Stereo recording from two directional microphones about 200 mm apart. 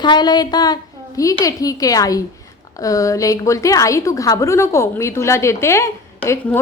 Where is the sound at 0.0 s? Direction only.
20° left (ahead or behind).